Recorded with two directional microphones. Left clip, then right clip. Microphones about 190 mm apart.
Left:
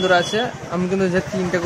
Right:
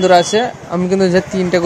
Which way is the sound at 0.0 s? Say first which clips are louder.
Right 7 dB; 25° right (ahead or behind).